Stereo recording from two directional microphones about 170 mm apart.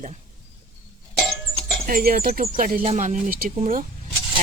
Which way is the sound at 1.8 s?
60° right (ahead or behind).